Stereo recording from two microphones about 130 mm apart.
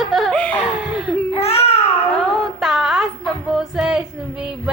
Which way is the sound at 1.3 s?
50° left (ahead or behind).